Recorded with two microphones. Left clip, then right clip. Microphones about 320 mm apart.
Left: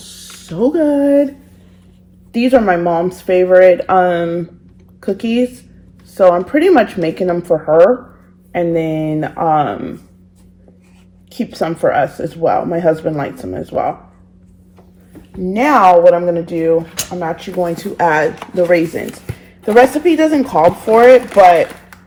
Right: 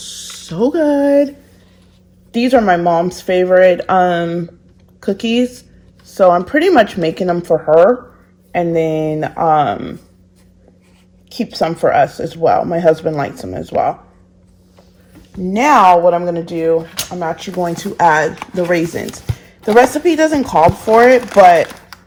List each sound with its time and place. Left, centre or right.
0.2 s speech: right
2.3 s speech: right
11.3 s speech: right
15.4 s speech: right